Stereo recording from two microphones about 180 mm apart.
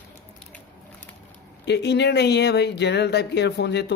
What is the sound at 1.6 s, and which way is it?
Speech, 70° left (ahead or behind).